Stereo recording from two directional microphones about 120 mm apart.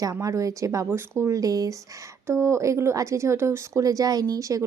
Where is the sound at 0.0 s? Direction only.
25° right (ahead or behind).